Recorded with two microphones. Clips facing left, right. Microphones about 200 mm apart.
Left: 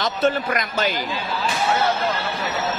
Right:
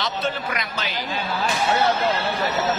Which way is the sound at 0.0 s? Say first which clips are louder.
Left 5 dB; 45° left (ahead or behind).